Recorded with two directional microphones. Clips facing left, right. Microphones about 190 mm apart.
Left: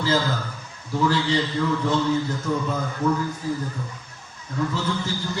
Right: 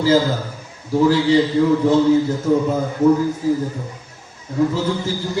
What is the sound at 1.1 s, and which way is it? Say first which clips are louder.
Speech: right 8 dB; 10° right (ahead or behind).